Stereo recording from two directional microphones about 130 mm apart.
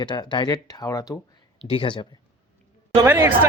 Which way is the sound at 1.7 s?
40° left (ahead or behind).